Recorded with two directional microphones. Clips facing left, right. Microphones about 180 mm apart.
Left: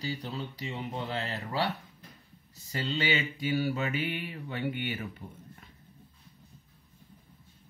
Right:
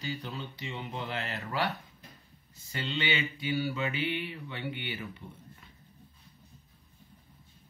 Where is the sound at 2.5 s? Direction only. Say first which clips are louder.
Left 2 dB; 40° left (ahead or behind).